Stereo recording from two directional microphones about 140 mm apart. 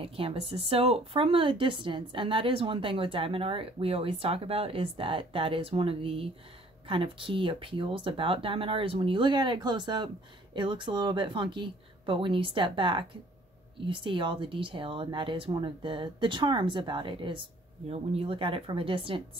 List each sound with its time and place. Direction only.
0.0 s speech: 40° right (ahead or behind)